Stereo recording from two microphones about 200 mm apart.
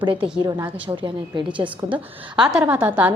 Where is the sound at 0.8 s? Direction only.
25° right (ahead or behind).